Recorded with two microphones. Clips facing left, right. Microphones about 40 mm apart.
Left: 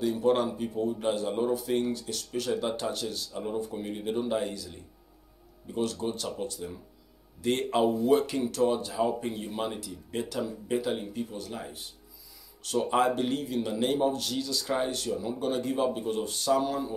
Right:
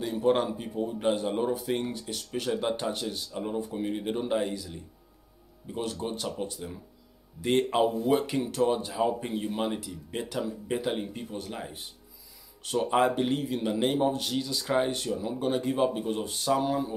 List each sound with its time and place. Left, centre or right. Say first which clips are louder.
0.0 s a man's voice: even; centre
5.8 s a man's voice: left 2 dB; centre